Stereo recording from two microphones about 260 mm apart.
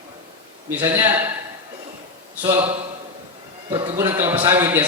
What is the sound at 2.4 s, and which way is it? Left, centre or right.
A man's voice, centre.